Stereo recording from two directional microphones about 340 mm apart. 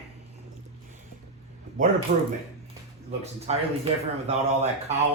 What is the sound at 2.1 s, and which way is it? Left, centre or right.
Speech, right.